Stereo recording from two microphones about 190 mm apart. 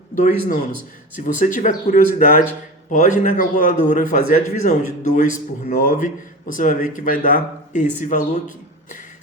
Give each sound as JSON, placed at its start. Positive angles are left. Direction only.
{"t": 0.2, "sound": "a man's voice", "side_deg": 45}